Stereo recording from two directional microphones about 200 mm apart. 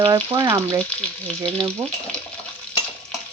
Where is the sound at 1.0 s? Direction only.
5° left (ahead or behind).